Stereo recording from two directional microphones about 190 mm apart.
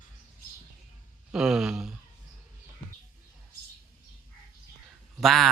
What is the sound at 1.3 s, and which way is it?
Speech, 5° right (ahead or behind).